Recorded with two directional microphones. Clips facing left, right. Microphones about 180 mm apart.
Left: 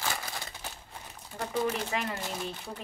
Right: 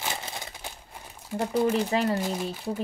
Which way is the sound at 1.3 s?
10° right (ahead or behind).